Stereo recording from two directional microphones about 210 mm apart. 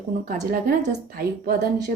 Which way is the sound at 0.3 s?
40° right (ahead or behind).